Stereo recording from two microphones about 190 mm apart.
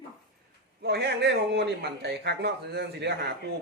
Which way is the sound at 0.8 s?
60° right (ahead or behind).